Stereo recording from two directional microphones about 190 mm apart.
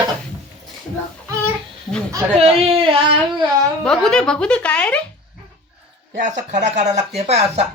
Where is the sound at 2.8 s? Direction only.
30° right (ahead or behind).